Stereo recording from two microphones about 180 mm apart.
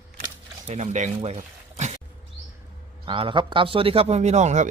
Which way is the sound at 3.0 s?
30° right (ahead or behind).